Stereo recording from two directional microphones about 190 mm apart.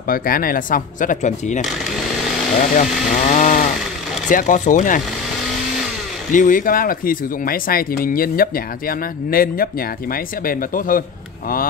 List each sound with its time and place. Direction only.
0.1 s speech: 50° left (ahead or behind)
2.8 s speech: 40° left (ahead or behind)
6.3 s speech: 45° left (ahead or behind)